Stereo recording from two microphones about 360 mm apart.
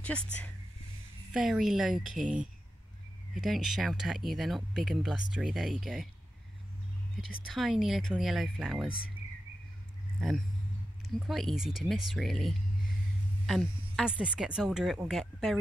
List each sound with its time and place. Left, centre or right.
1.3 s speech: centre
3.3 s speech: centre
7.2 s speech: left
7.5 s speech: centre
11.2 s speech: centre